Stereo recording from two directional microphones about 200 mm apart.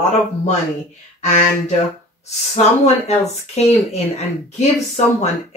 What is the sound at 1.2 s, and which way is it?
Speech, 35° left (ahead or behind).